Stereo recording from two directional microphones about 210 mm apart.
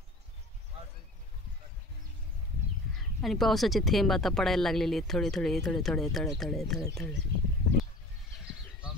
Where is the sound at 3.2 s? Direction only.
Centre (ahead or behind).